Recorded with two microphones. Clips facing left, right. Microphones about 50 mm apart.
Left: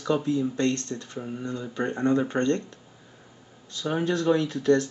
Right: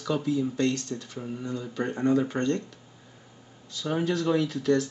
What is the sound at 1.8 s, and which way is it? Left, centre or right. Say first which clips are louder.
Speech: left 1 dB; left.